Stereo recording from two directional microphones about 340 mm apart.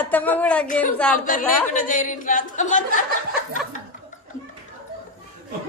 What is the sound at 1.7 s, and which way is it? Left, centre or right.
Speech, left.